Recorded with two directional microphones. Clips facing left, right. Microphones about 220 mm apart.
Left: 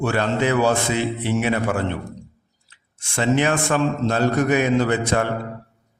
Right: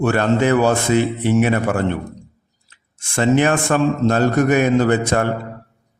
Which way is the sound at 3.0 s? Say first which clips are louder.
Right 4 dB; 50° right (ahead or behind).